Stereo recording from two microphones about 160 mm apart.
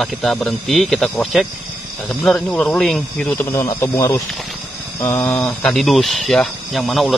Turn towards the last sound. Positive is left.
turn(degrees=0)  # may be behind; listen again after turning